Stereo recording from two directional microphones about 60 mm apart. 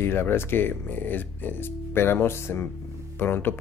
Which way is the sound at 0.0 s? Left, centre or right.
Left.